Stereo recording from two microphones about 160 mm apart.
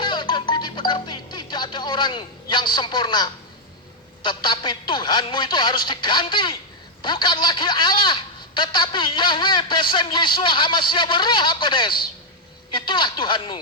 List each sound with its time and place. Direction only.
0.0 s speech: 30° left (ahead or behind)